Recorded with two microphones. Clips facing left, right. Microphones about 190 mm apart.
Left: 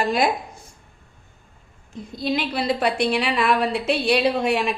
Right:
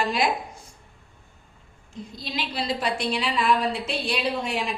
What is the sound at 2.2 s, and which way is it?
A woman's voice, 55° left (ahead or behind).